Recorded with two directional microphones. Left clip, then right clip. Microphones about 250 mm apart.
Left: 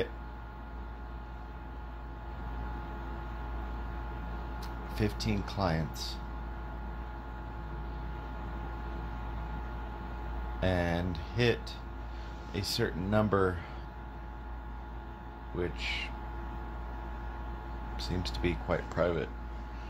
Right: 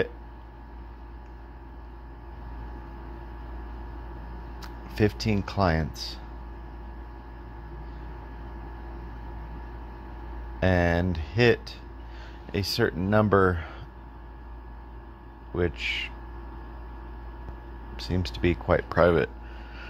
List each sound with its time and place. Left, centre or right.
4.6 s speech: right
10.6 s speech: right
15.5 s speech: right
17.9 s speech: right